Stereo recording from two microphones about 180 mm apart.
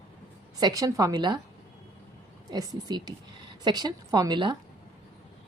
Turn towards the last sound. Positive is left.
turn(degrees=-25)  # may be behind; listen again after turning